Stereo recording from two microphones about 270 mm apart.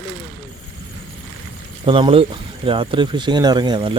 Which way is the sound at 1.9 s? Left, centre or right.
Centre.